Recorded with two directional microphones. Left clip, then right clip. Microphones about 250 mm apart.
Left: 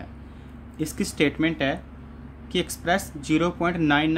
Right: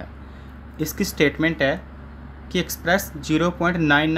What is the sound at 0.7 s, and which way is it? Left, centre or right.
Speech, centre.